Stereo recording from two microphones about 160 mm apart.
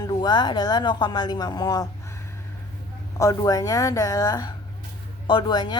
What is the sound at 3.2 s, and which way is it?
A woman's voice, 20° left (ahead or behind).